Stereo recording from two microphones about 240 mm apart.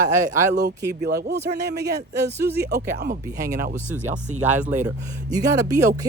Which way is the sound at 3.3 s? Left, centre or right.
Centre.